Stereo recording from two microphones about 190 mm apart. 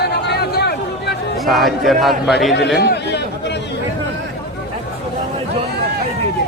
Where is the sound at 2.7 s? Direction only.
60° left (ahead or behind).